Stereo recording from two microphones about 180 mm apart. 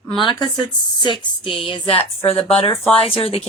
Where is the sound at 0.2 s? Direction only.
25° left (ahead or behind).